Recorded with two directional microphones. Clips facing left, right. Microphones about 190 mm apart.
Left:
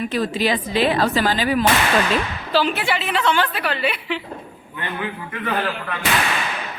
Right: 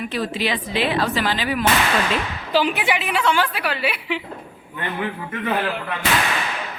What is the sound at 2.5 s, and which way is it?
A woman's voice, 15° right (ahead or behind).